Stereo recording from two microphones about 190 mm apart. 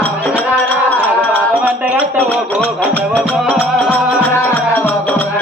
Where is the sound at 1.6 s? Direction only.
5° right (ahead or behind).